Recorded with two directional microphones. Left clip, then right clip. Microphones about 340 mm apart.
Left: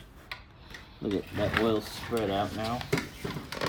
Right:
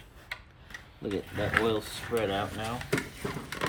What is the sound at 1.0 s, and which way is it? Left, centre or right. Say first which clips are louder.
Speech: left 2 dB; centre.